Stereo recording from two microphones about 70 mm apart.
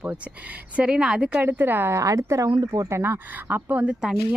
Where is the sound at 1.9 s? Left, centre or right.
Right.